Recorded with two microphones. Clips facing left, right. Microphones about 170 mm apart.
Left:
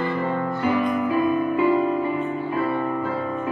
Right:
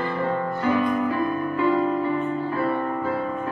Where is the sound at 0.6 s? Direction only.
15° left (ahead or behind).